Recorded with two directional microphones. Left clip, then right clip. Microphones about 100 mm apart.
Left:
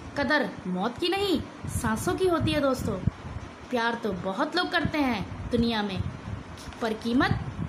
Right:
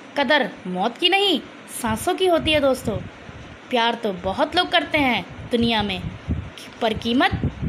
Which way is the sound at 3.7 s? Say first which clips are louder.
Right 7 dB; 35° right (ahead or behind).